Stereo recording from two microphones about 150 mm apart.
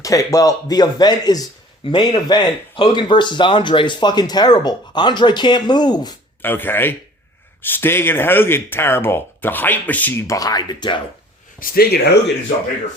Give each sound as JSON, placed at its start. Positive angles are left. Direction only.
{"t": 0.0, "sound": "speech", "side_deg": 20}
{"t": 6.4, "sound": "speech", "side_deg": 15}
{"t": 11.6, "sound": "speech", "side_deg": 85}